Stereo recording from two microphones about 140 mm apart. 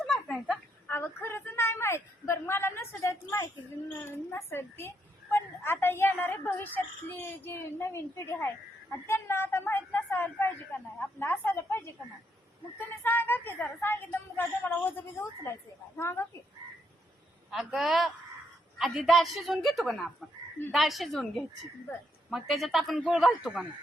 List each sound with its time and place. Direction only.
0.0 s a sound: 5° left (ahead or behind)
0.9 s a woman's voice: 15° left (ahead or behind)
12.9 s a woman's voice: 15° left (ahead or behind)
17.5 s a woman's voice: 5° right (ahead or behind)